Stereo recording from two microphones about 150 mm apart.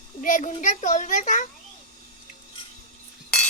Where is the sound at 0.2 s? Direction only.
60° left (ahead or behind).